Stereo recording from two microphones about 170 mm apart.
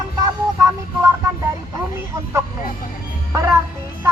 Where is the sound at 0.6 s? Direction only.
15° right (ahead or behind).